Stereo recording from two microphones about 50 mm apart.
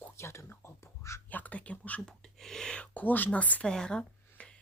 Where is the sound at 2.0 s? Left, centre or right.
Centre.